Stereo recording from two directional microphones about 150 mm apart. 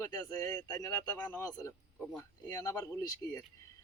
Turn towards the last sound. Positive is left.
turn(degrees=25)  # may be behind; listen again after turning